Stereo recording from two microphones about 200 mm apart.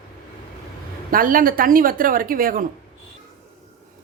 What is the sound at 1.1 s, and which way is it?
A woman's voice, 45° right (ahead or behind).